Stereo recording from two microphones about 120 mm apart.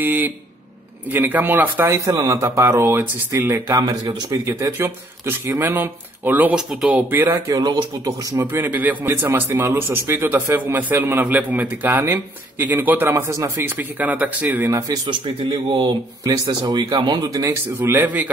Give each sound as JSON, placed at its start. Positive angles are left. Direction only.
{"t": 0.0, "sound": "a man's voice", "side_deg": -15}
{"t": 2.0, "sound": "speech", "side_deg": -30}
{"t": 3.8, "sound": "speech", "side_deg": -35}
{"t": 7.5, "sound": "a man's voice", "side_deg": -30}
{"t": 14.8, "sound": "speech", "side_deg": -40}
{"t": 17.7, "sound": "a man's voice", "side_deg": -15}